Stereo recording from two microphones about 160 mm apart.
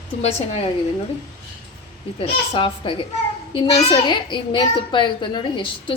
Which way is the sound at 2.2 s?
35° left (ahead or behind).